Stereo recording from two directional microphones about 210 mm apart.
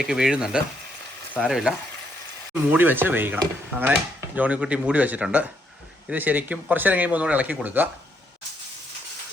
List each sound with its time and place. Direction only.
0.0 s speech: 5° right (ahead or behind)
2.7 s speech: 10° right (ahead or behind)